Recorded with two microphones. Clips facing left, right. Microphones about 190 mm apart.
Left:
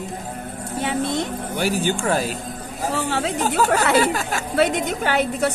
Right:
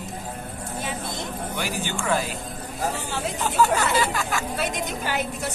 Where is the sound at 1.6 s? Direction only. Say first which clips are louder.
Left 9 dB; 40° left (ahead or behind).